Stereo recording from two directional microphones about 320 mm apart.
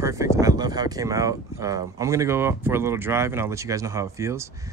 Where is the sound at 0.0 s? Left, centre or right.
Centre.